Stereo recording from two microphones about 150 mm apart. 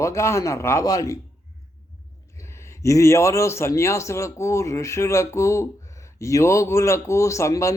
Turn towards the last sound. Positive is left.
turn(degrees=20)  # may be behind; listen again after turning